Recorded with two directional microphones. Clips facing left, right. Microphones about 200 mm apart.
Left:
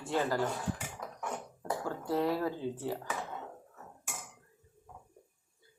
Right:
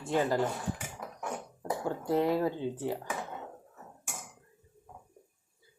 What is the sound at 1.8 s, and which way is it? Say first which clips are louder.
Speech: right 3 dB; 20° right (ahead or behind).